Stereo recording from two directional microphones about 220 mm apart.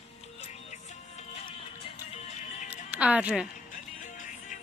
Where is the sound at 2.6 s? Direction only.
5° right (ahead or behind).